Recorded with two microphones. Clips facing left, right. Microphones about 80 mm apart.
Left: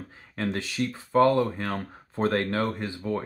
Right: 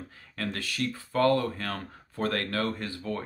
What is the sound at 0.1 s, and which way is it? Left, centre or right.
Speech, left.